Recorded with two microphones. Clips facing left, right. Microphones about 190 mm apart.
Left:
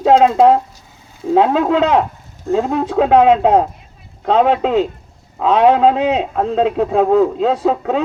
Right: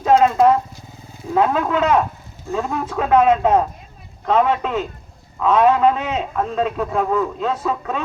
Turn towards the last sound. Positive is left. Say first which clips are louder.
# left 7 dB
turn(degrees=75)  # may be behind; listen again after turning